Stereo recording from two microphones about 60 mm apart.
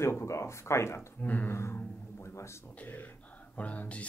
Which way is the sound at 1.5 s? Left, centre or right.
Left.